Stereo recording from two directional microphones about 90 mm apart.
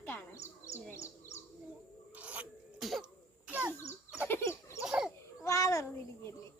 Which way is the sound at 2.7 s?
Centre (ahead or behind).